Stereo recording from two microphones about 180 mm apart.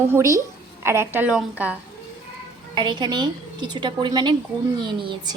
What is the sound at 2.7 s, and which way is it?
A woman's voice, 25° right (ahead or behind).